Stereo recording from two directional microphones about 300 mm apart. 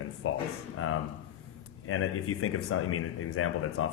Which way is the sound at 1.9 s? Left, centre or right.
Left.